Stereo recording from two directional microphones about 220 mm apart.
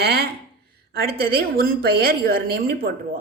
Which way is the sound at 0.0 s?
45° right (ahead or behind).